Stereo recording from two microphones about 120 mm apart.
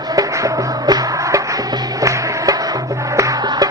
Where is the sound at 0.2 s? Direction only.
30° right (ahead or behind).